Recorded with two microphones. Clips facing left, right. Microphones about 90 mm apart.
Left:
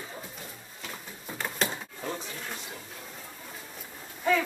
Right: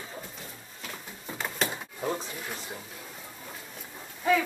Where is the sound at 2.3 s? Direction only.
10° right (ahead or behind).